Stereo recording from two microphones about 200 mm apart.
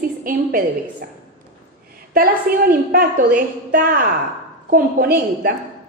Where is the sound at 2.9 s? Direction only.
45° right (ahead or behind).